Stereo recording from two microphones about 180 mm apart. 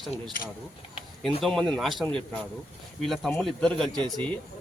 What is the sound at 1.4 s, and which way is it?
Speech, 5° left (ahead or behind).